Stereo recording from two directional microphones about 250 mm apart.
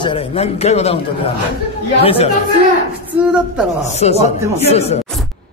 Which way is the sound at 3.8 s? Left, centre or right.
Left.